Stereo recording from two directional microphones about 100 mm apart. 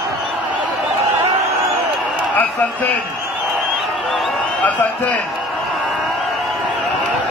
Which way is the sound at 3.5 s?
Centre (ahead or behind).